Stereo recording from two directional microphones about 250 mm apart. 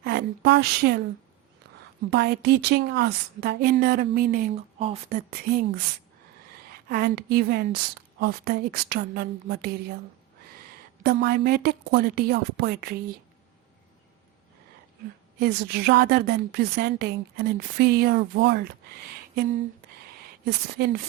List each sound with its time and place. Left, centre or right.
0.0 s speech: right
2.0 s a woman's voice: right
6.8 s a woman's voice: right
11.0 s a woman's voice: right
15.4 s a woman's voice: right
20.4 s a woman's voice: right